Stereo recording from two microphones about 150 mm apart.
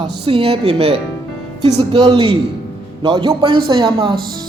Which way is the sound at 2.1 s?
45° right (ahead or behind).